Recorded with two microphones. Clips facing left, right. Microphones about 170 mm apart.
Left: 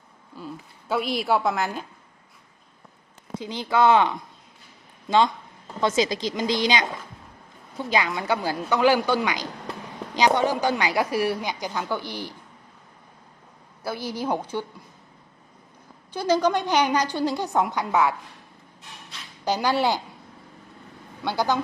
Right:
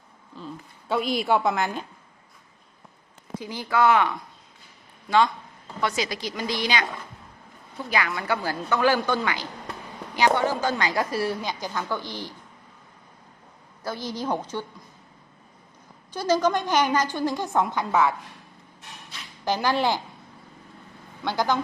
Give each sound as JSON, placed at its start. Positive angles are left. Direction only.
{"t": 0.3, "sound": "a woman's voice", "side_deg": 10}
{"t": 3.4, "sound": "speech", "side_deg": 20}
{"t": 7.9, "sound": "a woman's voice", "side_deg": 20}
{"t": 13.8, "sound": "a woman's voice", "side_deg": 10}
{"t": 16.1, "sound": "a woman's voice", "side_deg": 15}
{"t": 19.5, "sound": "a woman's voice", "side_deg": 15}
{"t": 21.2, "sound": "a woman's voice", "side_deg": 10}